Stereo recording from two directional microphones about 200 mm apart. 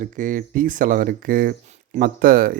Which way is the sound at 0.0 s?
40° right (ahead or behind).